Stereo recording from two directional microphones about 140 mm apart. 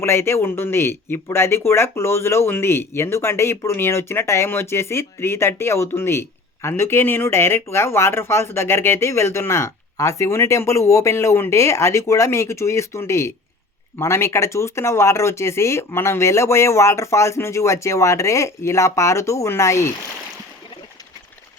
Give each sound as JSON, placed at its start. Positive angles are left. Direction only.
{"t": 0.0, "sound": "speech", "side_deg": 20}